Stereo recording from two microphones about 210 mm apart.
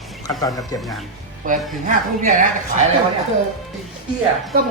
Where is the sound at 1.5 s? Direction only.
40° right (ahead or behind).